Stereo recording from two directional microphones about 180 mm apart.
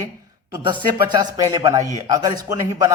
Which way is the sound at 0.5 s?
25° right (ahead or behind).